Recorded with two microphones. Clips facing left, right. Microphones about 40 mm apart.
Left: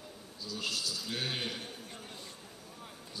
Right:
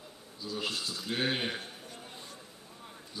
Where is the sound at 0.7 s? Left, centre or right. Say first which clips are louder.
Right 1 dB; right.